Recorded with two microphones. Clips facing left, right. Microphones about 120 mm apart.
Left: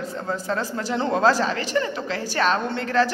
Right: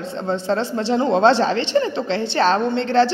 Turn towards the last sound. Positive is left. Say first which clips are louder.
# right 5 dB
turn(degrees=-30)  # may be behind; listen again after turning